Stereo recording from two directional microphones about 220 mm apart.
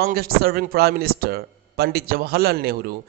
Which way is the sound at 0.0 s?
45° right (ahead or behind).